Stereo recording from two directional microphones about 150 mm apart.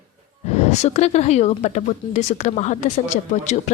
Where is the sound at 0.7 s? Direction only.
45° left (ahead or behind).